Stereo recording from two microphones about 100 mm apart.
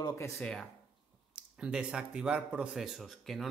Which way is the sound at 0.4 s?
5° left (ahead or behind).